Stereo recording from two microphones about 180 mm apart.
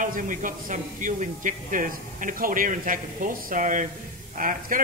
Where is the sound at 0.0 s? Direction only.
50° right (ahead or behind).